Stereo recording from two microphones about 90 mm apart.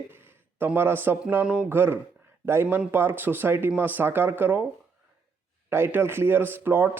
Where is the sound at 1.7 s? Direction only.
25° right (ahead or behind).